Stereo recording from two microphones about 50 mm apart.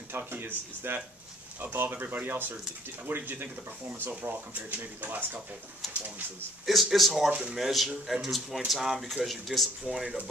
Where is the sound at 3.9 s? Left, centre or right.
Right.